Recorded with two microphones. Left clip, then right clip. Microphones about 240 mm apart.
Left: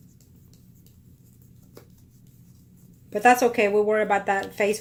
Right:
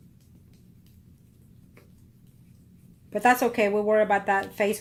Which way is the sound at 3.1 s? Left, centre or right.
Centre.